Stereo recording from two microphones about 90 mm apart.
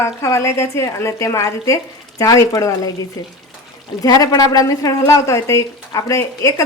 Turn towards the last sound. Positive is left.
turn(degrees=35)  # may be behind; listen again after turning